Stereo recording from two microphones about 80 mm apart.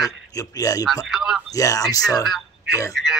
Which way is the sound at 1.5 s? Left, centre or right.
Left.